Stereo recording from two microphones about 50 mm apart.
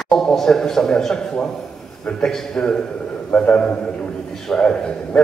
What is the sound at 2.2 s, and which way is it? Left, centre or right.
A man's voice, centre.